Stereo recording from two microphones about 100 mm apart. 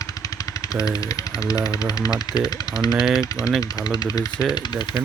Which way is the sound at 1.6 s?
40° left (ahead or behind).